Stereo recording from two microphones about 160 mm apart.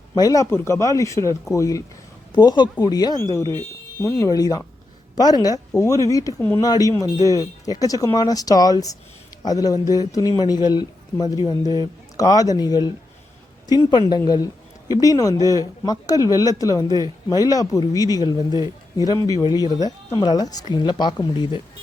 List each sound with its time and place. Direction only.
0.2 s speech: 20° left (ahead or behind)